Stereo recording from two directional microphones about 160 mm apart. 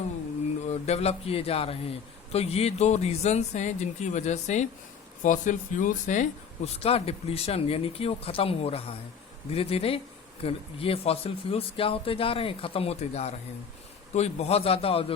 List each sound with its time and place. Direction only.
0.7 s speech: 40° left (ahead or behind)
6.7 s speech: 40° left (ahead or behind)